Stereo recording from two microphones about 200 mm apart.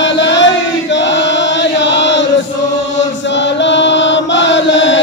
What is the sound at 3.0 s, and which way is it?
Chant, 65° left (ahead or behind).